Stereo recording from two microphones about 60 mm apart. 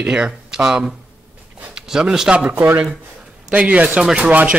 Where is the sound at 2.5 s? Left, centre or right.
Right.